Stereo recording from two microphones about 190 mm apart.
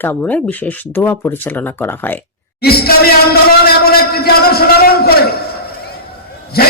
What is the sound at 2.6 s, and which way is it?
Speech, 55° left (ahead or behind).